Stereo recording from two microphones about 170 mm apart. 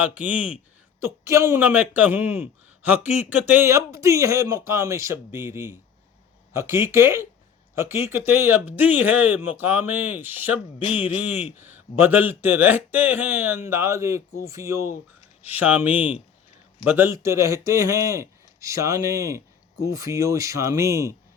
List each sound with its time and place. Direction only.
0.0 s speech: 10° right (ahead or behind)